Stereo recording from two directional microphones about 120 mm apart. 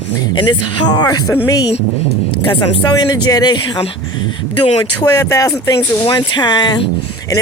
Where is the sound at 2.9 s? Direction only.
35° left (ahead or behind).